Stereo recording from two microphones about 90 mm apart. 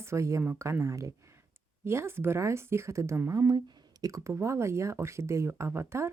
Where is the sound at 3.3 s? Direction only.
40° right (ahead or behind).